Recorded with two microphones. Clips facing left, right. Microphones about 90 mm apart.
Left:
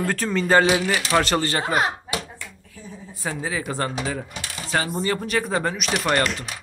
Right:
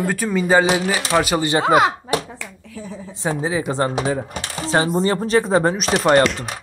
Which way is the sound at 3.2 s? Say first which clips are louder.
Right 6 dB; 20° right (ahead or behind).